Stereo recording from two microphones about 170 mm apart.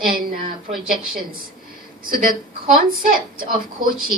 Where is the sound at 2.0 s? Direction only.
55° right (ahead or behind).